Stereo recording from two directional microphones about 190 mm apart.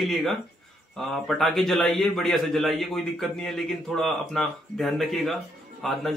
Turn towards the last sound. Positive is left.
turn(degrees=0)  # may be behind; listen again after turning